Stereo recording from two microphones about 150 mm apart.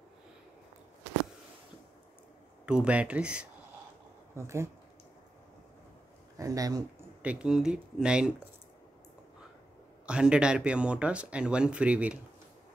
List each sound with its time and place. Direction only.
2.6 s speech: 5° right (ahead or behind)
4.4 s speech: 20° right (ahead or behind)
6.3 s speech: 25° right (ahead or behind)
7.2 s speech: 5° right (ahead or behind)
10.0 s speech: 5° right (ahead or behind)